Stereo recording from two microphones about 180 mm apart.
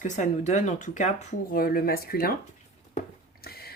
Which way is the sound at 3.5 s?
60° left (ahead or behind).